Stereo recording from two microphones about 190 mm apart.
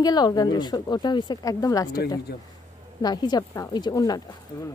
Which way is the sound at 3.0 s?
20° left (ahead or behind).